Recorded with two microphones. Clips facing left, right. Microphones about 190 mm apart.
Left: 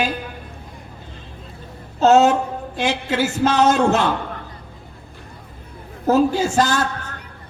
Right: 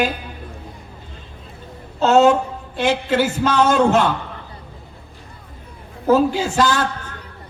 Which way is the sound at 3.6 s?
45° left (ahead or behind).